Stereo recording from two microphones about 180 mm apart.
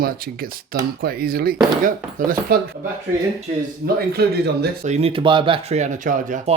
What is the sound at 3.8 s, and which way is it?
Speech, 60° right (ahead or behind).